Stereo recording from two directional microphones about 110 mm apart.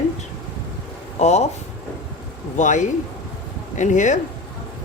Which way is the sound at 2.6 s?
90° left.